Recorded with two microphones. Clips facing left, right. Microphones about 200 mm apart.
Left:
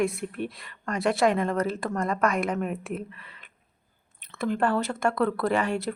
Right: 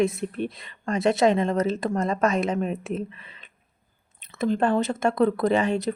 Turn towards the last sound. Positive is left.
turn(degrees=-20)  # may be behind; listen again after turning